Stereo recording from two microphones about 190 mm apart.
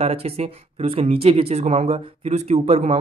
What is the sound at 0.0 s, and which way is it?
Speech, 35° right (ahead or behind).